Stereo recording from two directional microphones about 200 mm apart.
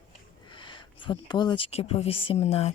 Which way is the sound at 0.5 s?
25° left (ahead or behind).